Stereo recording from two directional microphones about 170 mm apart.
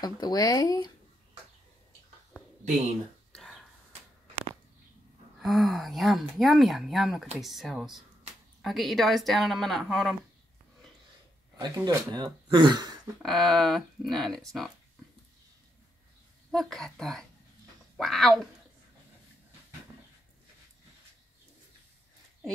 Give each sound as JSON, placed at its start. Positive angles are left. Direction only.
{"t": 0.0, "sound": "speech", "side_deg": 25}
{"t": 3.3, "sound": "a sound", "side_deg": 0}
{"t": 5.4, "sound": "speech", "side_deg": 0}
{"t": 11.6, "sound": "speech", "side_deg": -25}
{"t": 13.2, "sound": "speech", "side_deg": 0}
{"t": 16.5, "sound": "speech", "side_deg": 0}